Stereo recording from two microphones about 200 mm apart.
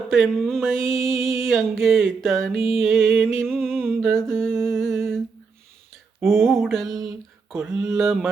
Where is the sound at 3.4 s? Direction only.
5° left (ahead or behind).